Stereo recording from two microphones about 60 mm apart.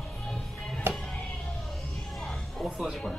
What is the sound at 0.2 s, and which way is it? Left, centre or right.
Music, centre.